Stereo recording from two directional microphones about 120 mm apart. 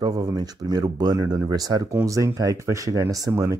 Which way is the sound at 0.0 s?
30° right (ahead or behind).